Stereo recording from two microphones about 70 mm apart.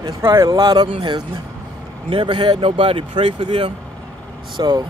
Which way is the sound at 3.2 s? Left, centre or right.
Right.